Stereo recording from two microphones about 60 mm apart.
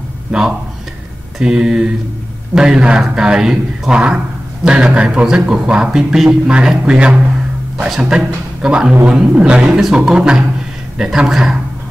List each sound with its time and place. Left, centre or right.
0.3 s a man's voice: centre